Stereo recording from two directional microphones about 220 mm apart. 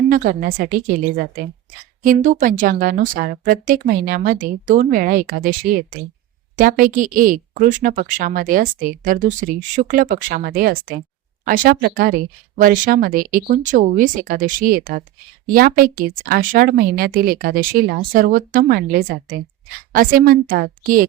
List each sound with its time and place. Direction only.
0.1 s a woman's voice: 40° right (ahead or behind)